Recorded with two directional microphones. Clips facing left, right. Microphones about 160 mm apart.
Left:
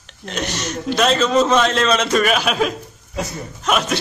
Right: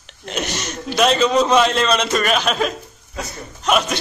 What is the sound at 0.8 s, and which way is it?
A man's voice, 5° right (ahead or behind).